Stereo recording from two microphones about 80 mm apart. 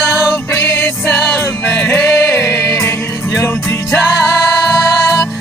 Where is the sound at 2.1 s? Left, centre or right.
Left.